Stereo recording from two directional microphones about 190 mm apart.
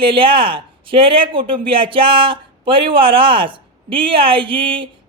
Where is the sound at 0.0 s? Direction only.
25° right (ahead or behind).